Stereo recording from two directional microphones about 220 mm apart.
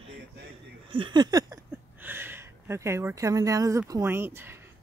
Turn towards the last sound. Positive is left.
turn(degrees=-10)  # may be behind; listen again after turning